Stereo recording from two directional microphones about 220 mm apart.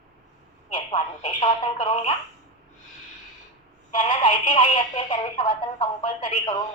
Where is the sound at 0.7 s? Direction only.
20° left (ahead or behind).